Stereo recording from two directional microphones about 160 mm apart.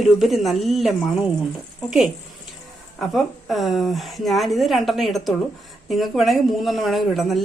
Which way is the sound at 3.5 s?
Centre (ahead or behind).